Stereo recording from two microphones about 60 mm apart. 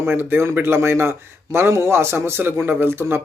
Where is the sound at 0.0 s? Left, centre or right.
Right.